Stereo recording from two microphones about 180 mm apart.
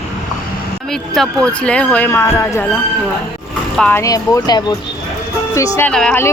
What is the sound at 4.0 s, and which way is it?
Speech, 20° left (ahead or behind).